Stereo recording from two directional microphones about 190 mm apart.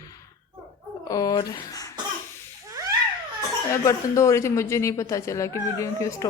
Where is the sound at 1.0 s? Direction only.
20° left (ahead or behind).